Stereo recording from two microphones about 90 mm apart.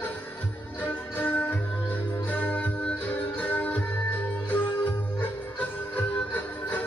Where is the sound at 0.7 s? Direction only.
20° left (ahead or behind).